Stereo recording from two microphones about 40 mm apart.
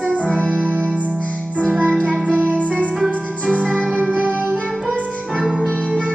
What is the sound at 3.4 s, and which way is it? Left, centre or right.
Music, right.